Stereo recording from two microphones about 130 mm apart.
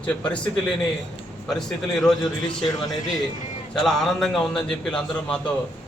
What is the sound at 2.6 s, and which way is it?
Speech, 30° left (ahead or behind).